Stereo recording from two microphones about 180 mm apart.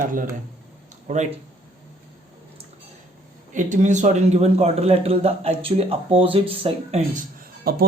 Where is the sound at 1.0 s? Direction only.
40° right (ahead or behind).